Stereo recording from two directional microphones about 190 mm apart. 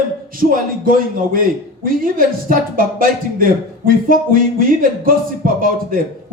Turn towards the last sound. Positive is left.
turn(degrees=-50)  # may be behind; listen again after turning